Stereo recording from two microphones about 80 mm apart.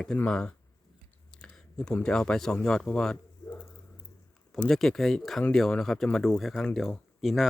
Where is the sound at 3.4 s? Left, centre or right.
Centre.